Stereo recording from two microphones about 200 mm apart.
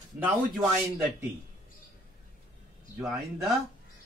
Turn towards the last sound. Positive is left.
turn(degrees=0)  # may be behind; listen again after turning